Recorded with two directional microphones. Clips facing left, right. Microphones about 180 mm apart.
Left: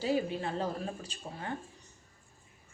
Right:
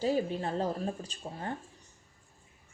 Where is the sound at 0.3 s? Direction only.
40° right (ahead or behind).